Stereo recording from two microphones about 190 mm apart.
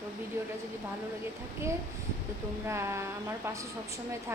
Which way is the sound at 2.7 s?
15° right (ahead or behind).